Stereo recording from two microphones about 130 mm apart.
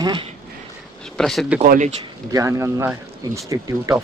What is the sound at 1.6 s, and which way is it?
Speech, 70° right (ahead or behind).